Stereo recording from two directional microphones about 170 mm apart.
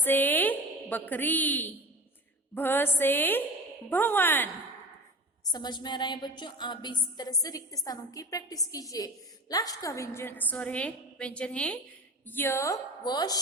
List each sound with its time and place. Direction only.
0.0 s a sound: 10° left (ahead or behind)
2.6 s a woman's voice: 10° left (ahead or behind)
5.5 s a woman's voice: 25° left (ahead or behind)